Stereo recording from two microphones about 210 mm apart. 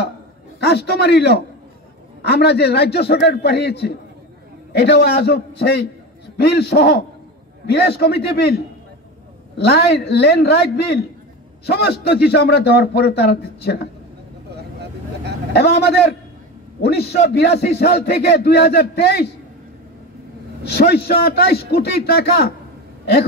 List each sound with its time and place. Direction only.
0.6 s a man's voice: 50° left (ahead or behind)
14.5 s vehicle: 50° right (ahead or behind)
15.5 s a man's voice: 50° left (ahead or behind)
20.6 s a man's voice: 50° left (ahead or behind)